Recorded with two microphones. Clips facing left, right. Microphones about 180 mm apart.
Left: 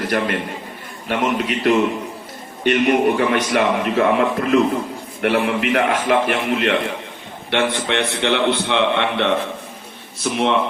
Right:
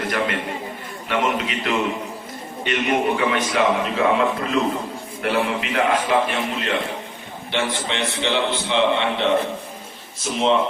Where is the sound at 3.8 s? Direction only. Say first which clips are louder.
Left 3 dB; 60° left (ahead or behind).